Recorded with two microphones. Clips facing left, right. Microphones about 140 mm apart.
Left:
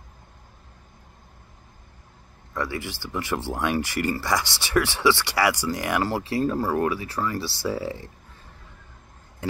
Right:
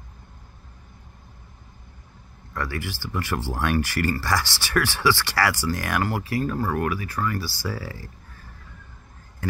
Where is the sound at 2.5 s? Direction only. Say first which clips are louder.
Left 1 dB; 20° left (ahead or behind).